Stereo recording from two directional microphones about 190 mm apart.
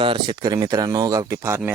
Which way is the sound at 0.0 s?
25° right (ahead or behind).